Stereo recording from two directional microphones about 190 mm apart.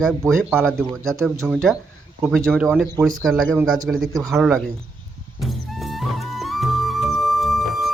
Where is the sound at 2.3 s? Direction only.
Centre (ahead or behind).